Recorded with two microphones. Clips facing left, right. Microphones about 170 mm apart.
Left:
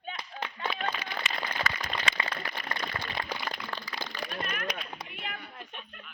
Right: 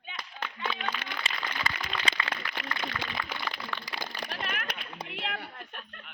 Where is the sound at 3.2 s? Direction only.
40° left (ahead or behind).